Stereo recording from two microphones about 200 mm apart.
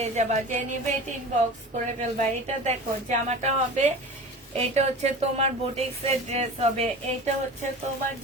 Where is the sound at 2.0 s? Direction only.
35° right (ahead or behind).